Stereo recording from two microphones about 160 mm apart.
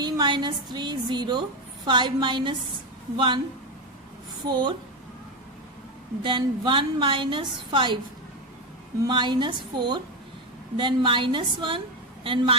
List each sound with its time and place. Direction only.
0.0 s a woman's voice: 30° right (ahead or behind)
4.4 s a woman's voice: 30° right (ahead or behind)
6.2 s a woman's voice: 30° right (ahead or behind)
9.0 s a woman's voice: 30° right (ahead or behind)